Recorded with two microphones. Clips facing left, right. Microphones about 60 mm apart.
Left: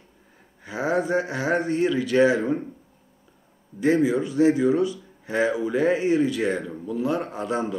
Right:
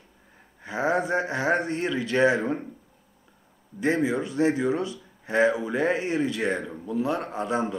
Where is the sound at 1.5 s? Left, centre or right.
Centre.